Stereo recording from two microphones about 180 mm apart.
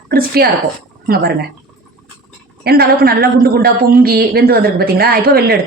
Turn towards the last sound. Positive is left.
turn(degrees=-60)  # may be behind; listen again after turning